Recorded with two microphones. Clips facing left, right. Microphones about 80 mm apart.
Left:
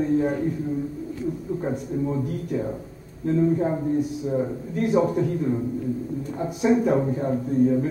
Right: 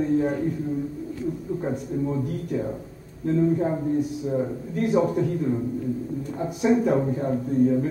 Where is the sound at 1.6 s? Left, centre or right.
Centre.